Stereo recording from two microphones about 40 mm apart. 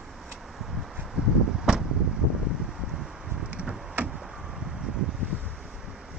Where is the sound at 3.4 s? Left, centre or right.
Right.